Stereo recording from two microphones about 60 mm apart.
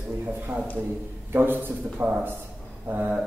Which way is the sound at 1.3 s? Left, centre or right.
Right.